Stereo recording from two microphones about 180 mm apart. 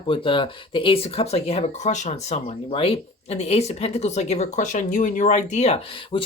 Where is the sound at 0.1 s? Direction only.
30° left (ahead or behind).